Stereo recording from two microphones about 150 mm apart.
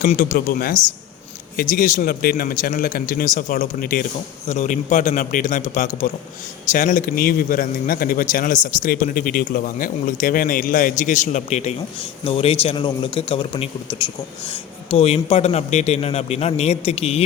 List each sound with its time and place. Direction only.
0.0 s speech: 60° left (ahead or behind)
4.4 s a man's voice: 50° left (ahead or behind)